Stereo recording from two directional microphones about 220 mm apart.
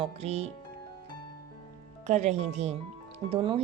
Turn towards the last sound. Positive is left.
turn(degrees=-25)  # may be behind; listen again after turning